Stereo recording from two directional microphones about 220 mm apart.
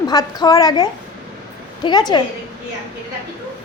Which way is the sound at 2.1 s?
20° left (ahead or behind).